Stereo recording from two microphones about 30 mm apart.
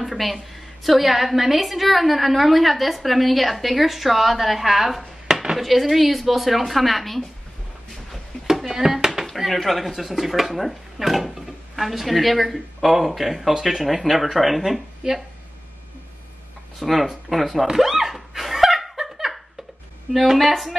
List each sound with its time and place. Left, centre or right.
0.0 s speech: centre
5.3 s a sound: centre
5.6 s speech: centre
8.5 s a sound: centre
9.2 s speech: centre
16.8 s speech: centre
17.7 s laughter: centre
20.1 s speech: centre